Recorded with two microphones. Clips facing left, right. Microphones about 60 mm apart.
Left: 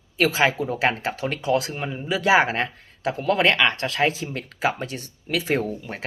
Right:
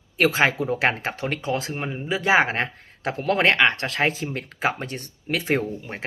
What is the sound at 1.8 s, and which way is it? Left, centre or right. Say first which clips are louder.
Speech: even; centre.